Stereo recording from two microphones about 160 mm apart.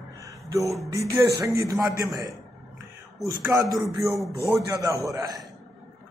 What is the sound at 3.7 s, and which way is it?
Speech, centre (ahead or behind).